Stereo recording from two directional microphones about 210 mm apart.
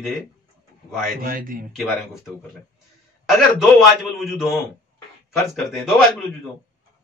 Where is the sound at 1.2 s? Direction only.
40° right (ahead or behind).